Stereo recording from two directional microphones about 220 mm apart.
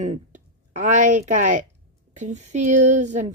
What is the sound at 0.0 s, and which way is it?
Speech, 30° right (ahead or behind).